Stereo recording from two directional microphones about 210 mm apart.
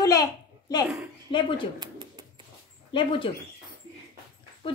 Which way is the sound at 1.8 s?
20° right (ahead or behind).